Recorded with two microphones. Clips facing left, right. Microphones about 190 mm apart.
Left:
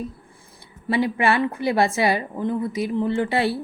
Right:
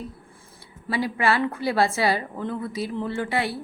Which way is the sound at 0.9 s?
20° left (ahead or behind).